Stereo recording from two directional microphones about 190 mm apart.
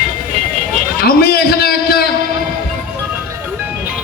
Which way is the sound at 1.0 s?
55° left (ahead or behind).